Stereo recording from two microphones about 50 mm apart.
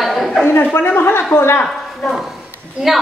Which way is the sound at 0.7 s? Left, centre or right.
Left.